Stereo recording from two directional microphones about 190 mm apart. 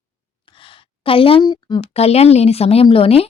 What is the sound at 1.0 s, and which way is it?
A woman's voice, 30° left (ahead or behind).